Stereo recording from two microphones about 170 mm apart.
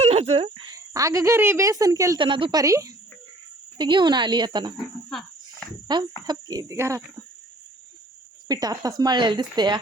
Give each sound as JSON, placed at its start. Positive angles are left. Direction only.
{"t": 0.0, "sound": "a woman's voice", "side_deg": -40}
{"t": 5.0, "sound": "a sound", "side_deg": 5}
{"t": 5.9, "sound": "a woman's voice", "side_deg": -25}
{"t": 8.4, "sound": "a woman's voice", "side_deg": -20}